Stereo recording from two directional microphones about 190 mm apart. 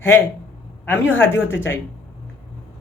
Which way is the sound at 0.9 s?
10° left (ahead or behind).